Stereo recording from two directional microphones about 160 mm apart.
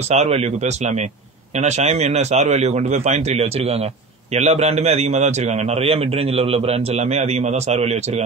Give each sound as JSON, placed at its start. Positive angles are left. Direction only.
{"t": 0.1, "sound": "a man's voice", "side_deg": -40}